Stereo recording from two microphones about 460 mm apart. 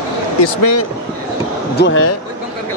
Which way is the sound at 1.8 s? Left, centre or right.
Left.